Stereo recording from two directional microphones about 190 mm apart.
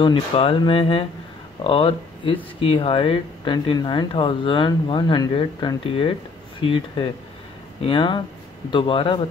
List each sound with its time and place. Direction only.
0.0 s speech: 25° left (ahead or behind)